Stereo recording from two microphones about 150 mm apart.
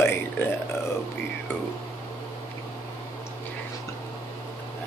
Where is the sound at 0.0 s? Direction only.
15° left (ahead or behind).